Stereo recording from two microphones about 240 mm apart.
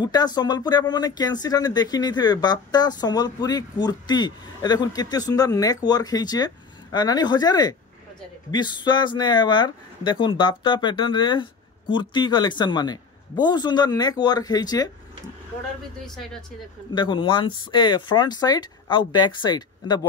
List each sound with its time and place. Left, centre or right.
0.0 s speech: centre
16.9 s speech: centre